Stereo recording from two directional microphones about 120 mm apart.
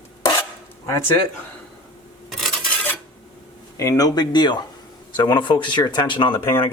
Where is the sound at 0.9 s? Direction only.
20° left (ahead or behind).